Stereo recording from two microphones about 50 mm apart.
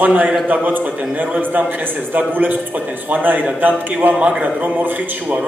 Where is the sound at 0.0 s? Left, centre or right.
Right.